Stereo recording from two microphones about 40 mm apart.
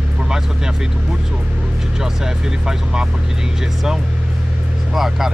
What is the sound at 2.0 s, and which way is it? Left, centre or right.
Speech, centre.